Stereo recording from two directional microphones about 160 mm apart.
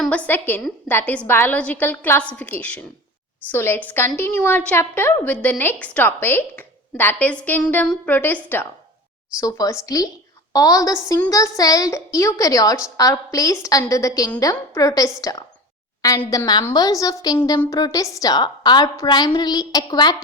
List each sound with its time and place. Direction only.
0.0 s a woman's voice: 10° left (ahead or behind)
9.4 s a woman's voice: 25° left (ahead or behind)